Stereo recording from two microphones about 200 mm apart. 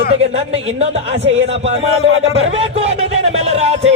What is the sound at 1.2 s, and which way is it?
Speech, 70° right (ahead or behind).